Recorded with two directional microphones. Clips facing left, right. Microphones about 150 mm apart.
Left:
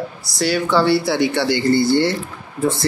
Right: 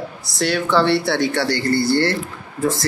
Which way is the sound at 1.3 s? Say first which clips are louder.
Left 3 dB; 20° left (ahead or behind).